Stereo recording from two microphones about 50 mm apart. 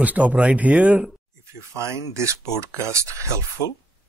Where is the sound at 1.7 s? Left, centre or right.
Right.